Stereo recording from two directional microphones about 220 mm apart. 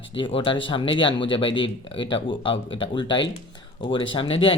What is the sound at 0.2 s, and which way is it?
Speech, 25° left (ahead or behind).